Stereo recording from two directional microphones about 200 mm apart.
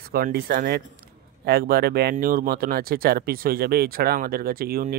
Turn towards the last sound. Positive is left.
turn(degrees=-45)  # may be behind; listen again after turning